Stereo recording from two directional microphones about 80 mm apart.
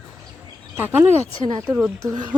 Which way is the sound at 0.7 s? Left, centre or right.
Right.